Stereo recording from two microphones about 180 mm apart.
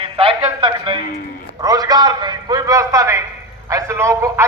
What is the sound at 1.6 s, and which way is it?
A man's voice, 20° right (ahead or behind).